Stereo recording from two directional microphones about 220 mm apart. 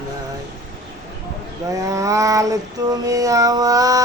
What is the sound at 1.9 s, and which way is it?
Female singing, 15° right (ahead or behind).